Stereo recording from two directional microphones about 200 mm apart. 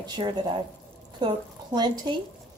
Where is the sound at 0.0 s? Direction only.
25° right (ahead or behind).